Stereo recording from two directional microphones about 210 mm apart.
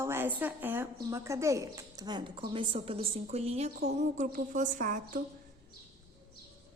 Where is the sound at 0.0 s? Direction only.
10° right (ahead or behind); by 5.2 s 40° right (ahead or behind).